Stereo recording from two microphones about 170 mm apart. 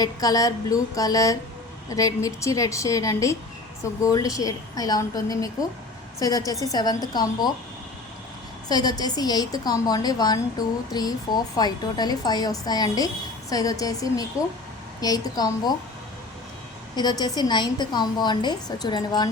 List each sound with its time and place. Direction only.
0.0 s a woman's voice: 20° left (ahead or behind)
8.7 s a woman's voice: 25° left (ahead or behind)
16.9 s a woman's voice: 25° left (ahead or behind)